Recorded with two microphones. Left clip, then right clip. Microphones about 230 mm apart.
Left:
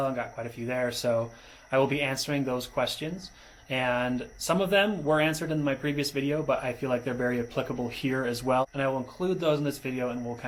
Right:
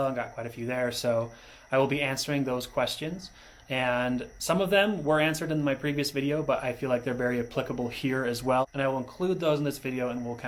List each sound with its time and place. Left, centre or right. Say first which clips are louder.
0.0 s speech: even; right